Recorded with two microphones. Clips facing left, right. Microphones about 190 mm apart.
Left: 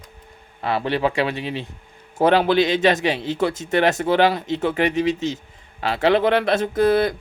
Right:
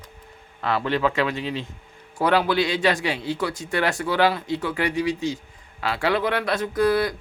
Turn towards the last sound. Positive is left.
turn(degrees=25)  # may be behind; listen again after turning